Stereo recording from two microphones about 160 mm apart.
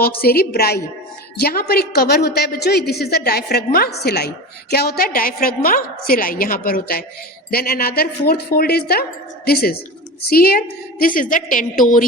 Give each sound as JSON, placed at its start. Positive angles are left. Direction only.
{"t": 0.0, "sound": "a woman's voice", "side_deg": 70}
{"t": 4.7, "sound": "a woman's voice", "side_deg": 75}